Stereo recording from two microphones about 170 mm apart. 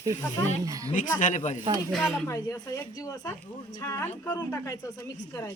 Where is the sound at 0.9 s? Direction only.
50° left (ahead or behind).